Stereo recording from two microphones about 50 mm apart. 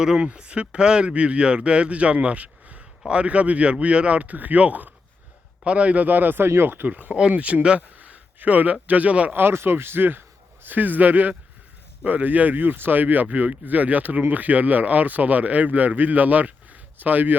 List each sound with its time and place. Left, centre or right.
0.2 s speech: right
6.8 s speech: right
7.1 s speech: right
9.3 s a man's voice: right